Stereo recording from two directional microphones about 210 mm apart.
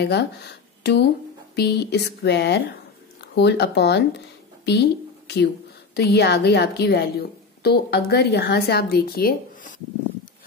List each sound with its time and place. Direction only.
0.0 s a woman's voice: 50° left (ahead or behind)